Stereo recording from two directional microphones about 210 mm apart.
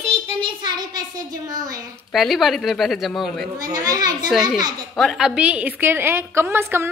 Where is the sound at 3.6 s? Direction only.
15° right (ahead or behind).